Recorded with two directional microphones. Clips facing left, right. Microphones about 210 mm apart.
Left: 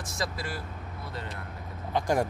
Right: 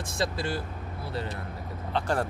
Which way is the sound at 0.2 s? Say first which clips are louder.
Right 5 dB; 30° right (ahead or behind).